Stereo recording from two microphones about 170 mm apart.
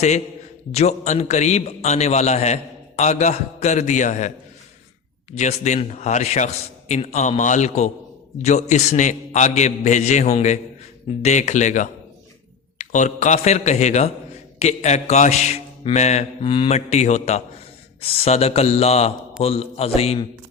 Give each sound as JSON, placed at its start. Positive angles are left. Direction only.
{"t": 0.7, "sound": "a man's voice", "side_deg": 40}
{"t": 5.3, "sound": "a man's voice", "side_deg": 40}